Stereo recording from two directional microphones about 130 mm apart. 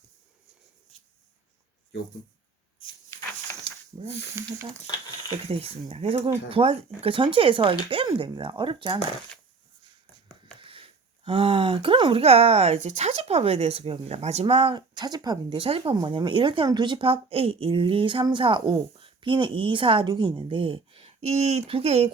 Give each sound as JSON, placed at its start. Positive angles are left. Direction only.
{"t": 3.9, "sound": "speech", "side_deg": -35}
{"t": 5.5, "sound": "speech", "side_deg": -50}
{"t": 8.0, "sound": "speech", "side_deg": -30}
{"t": 10.4, "sound": "speech", "side_deg": -40}
{"t": 14.4, "sound": "speech", "side_deg": -40}
{"t": 15.6, "sound": "speech", "side_deg": -40}